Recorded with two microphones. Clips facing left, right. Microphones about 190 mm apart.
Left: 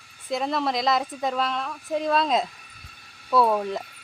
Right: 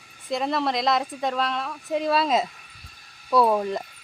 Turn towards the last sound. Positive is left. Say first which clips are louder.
# right 1 dB
turn(degrees=0)  # may be behind; listen again after turning